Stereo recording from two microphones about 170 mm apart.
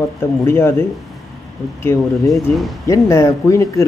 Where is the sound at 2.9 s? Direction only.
15° left (ahead or behind).